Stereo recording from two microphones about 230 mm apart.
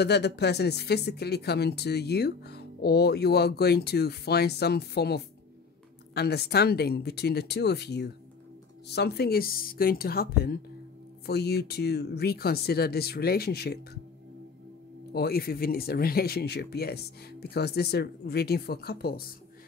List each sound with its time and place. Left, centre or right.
0.0 s a woman's voice: left
15.1 s speech: left